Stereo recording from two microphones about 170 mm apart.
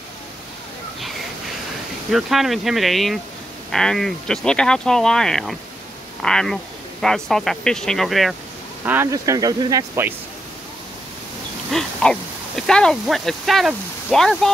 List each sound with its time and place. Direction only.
2.0 s speech: centre (ahead or behind)
8.8 s speech: 15° right (ahead or behind)
11.7 s speech: 5° left (ahead or behind)